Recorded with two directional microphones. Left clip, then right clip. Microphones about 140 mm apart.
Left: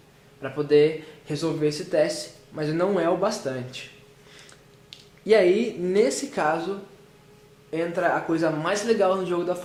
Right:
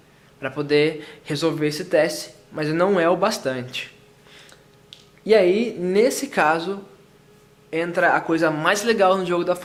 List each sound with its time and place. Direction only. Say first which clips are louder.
0.4 s speech: even; 40° right (ahead or behind)
4.3 s a sound: right 3 dB; 15° right (ahead or behind)
5.2 s speech: right 2 dB; 20° right (ahead or behind); by 6.7 s 35° right (ahead or behind)
7.7 s speech: right 5 dB; 40° right (ahead or behind)